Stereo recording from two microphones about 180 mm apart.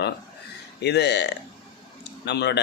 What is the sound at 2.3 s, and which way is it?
Speech, 70° left (ahead or behind).